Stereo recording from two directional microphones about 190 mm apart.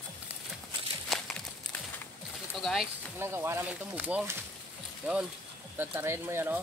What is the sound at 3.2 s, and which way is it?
Speech, 15° right (ahead or behind).